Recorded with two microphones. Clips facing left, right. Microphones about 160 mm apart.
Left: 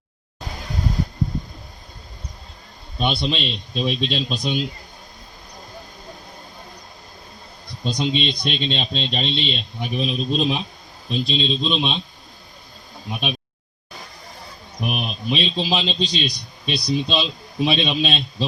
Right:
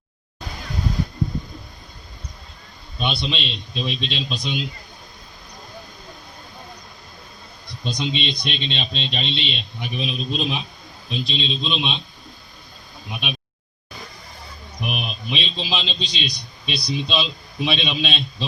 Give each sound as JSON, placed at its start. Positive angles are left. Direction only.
{"t": 3.0, "sound": "a man's voice", "side_deg": 45}
{"t": 7.9, "sound": "a man's voice", "side_deg": 45}
{"t": 13.1, "sound": "a man's voice", "side_deg": 40}
{"t": 14.8, "sound": "a man's voice", "side_deg": 40}